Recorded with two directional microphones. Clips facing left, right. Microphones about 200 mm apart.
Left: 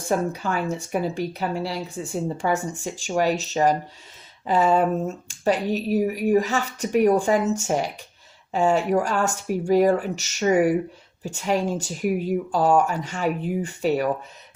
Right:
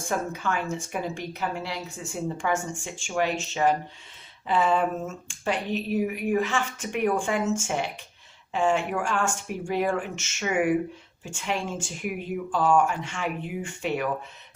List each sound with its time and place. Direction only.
0.1 s speech: 35° left (ahead or behind)